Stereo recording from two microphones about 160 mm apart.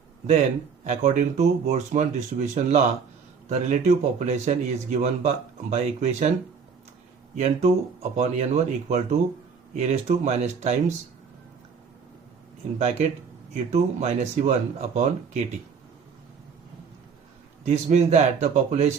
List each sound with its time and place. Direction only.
0.9 s speech: 50° right (ahead or behind)
7.3 s speech: 45° right (ahead or behind)
12.8 s speech: 45° right (ahead or behind)
17.7 s speech: 45° right (ahead or behind)